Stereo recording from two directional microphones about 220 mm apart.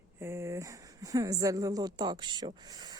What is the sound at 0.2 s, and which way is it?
Speech, 10° right (ahead or behind).